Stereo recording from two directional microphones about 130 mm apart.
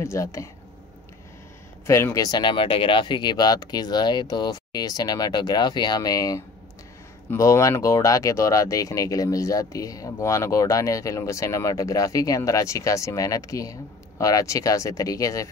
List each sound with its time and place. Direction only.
0.0 s speech: 20° left (ahead or behind)
1.9 s speech: 20° left (ahead or behind)